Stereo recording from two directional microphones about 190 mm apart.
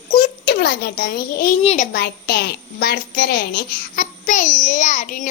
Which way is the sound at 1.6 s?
35° left (ahead or behind).